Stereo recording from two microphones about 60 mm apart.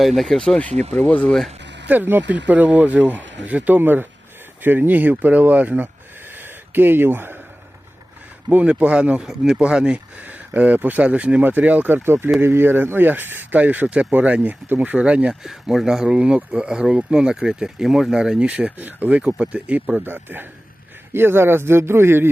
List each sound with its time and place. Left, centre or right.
0.0 s speech: centre
0.3 s speech: centre
1.9 s speech: right
6.3 s a sound: right
8.4 s speech: right
12.0 s speech: right
15.3 s speech: centre
18.3 s speech: right
19.2 s speech: centre
20.1 s speech: right